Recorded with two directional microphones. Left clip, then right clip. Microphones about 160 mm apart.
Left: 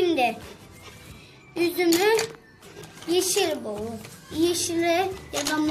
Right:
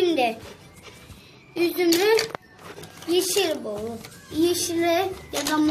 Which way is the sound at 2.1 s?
35° right (ahead or behind).